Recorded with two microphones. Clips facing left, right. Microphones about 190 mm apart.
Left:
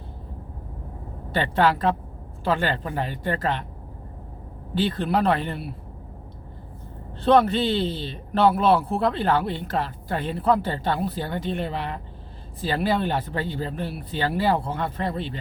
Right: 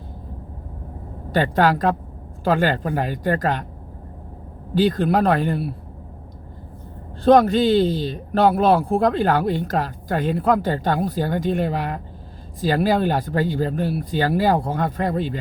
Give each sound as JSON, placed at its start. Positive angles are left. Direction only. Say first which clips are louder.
{"t": 1.3, "sound": "speech", "louder": "right 3 dB", "side_deg": -40}
{"t": 4.7, "sound": "speech", "louder": "right 5 dB", "side_deg": -40}
{"t": 7.3, "sound": "speech", "louder": "right 5 dB", "side_deg": -40}